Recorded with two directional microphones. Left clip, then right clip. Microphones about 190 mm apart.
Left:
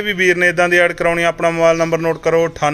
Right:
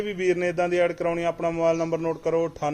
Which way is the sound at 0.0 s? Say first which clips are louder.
Left 11 dB; centre (ahead or behind).